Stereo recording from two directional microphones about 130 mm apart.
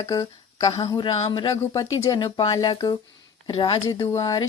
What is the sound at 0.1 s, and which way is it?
Speech, 30° left (ahead or behind).